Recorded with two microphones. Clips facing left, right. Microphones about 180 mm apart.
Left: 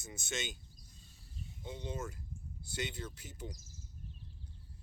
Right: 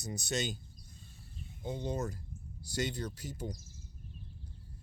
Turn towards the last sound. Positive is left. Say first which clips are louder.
# right 6 dB
turn(degrees=-40)  # may be behind; listen again after turning